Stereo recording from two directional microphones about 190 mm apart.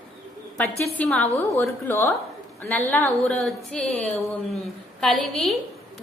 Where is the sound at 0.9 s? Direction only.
5° left (ahead or behind).